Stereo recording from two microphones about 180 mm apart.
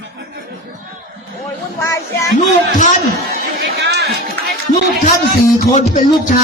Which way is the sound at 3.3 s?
65° right (ahead or behind).